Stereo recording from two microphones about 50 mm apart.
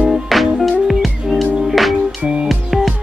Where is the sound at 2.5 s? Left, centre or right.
Centre.